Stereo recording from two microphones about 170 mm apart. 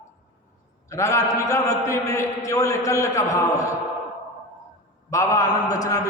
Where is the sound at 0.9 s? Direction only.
15° left (ahead or behind).